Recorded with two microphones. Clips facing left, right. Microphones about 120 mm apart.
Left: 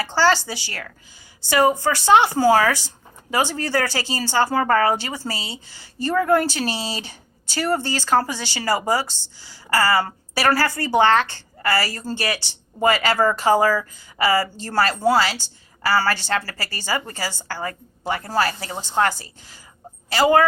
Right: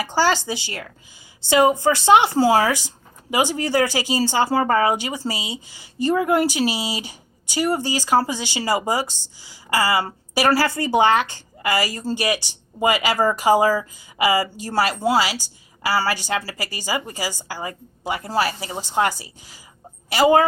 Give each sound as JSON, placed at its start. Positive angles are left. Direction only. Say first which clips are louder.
{"t": 0.0, "sound": "a woman's voice", "louder": "left 1 dB", "side_deg": -15}